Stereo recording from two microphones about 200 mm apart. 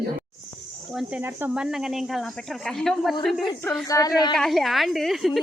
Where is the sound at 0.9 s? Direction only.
5° right (ahead or behind).